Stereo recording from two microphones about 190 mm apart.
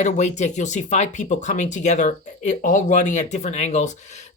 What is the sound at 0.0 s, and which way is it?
Speech, 40° left (ahead or behind).